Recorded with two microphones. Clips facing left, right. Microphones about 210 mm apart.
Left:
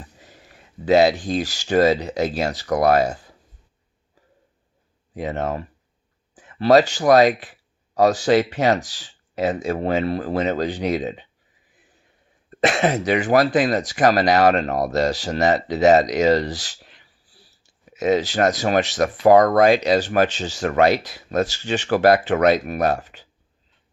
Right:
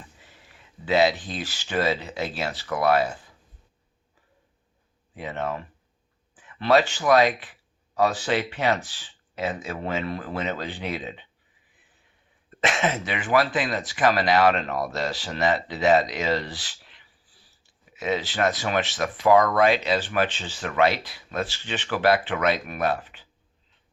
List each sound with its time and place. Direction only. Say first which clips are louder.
0.0 s speech: left 5 dB; 40° left (ahead or behind)
5.1 s speech: left 5 dB; 40° left (ahead or behind)
12.5 s speech: left 6 dB; 40° left (ahead or behind)